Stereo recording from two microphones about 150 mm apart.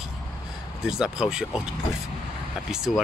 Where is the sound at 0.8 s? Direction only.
5° right (ahead or behind).